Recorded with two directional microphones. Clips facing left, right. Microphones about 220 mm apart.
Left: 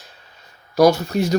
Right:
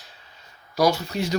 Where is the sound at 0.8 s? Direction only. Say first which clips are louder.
Left 7 dB; 45° left (ahead or behind).